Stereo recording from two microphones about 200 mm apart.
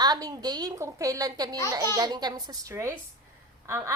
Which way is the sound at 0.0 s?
20° right (ahead or behind).